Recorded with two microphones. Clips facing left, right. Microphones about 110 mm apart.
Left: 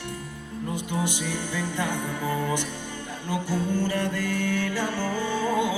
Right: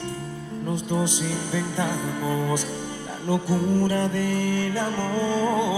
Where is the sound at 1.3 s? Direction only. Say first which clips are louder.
Right 2 dB; 20° right (ahead or behind).